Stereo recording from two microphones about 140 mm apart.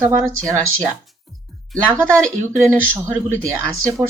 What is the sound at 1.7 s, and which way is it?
Speech, 5° left (ahead or behind).